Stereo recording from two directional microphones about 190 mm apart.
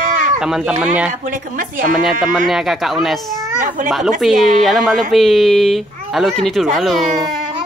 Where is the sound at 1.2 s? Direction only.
45° right (ahead or behind).